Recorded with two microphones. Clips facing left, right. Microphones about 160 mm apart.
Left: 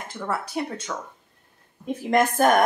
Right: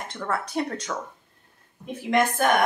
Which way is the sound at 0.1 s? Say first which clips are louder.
Even; 5° left (ahead or behind).